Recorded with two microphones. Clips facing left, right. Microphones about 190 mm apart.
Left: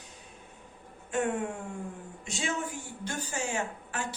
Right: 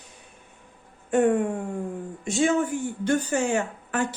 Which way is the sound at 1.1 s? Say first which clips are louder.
Right 9 dB; 55° right (ahead or behind).